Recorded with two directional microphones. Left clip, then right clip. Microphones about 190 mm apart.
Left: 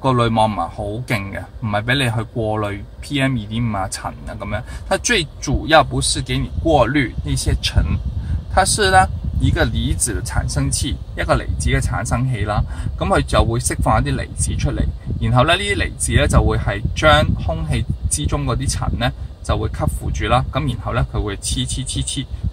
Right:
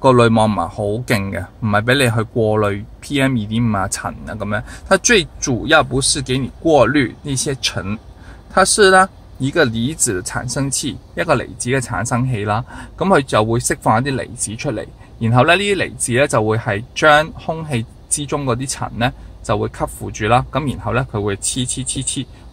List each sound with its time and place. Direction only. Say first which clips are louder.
0.0 s speech: right 4 dB; 55° right (ahead or behind)